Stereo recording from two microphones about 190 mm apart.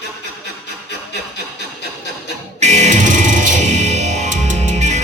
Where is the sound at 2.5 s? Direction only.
35° right (ahead or behind).